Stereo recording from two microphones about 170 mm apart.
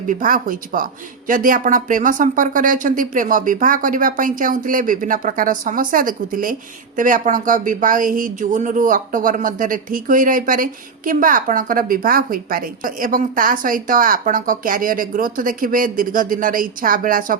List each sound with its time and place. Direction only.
0.1 s speech: 55° right (ahead or behind)